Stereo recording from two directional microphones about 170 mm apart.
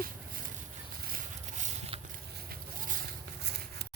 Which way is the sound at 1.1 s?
50° right (ahead or behind).